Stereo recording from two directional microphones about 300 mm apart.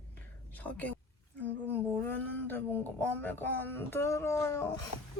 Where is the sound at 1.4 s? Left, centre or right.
Centre.